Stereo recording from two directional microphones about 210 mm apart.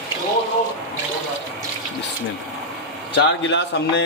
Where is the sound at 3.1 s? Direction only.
55° left (ahead or behind).